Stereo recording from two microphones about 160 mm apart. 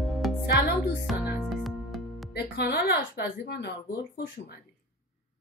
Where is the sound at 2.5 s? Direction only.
90° left.